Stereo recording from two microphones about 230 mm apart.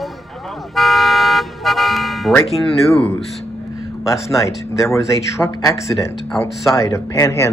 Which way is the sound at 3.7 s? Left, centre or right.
Centre.